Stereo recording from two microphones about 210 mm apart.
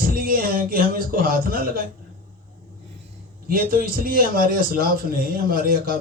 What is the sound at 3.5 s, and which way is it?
A man's voice, 45° right (ahead or behind).